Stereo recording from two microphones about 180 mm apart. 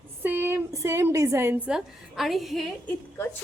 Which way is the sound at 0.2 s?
10° right (ahead or behind).